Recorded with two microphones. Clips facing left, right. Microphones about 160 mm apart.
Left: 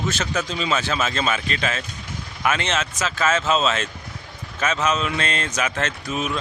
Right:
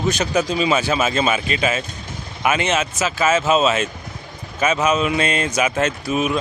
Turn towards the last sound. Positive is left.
turn(degrees=-10)  # may be behind; listen again after turning